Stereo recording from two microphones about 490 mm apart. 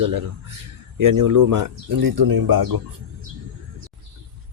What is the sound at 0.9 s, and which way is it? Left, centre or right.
Speech, right.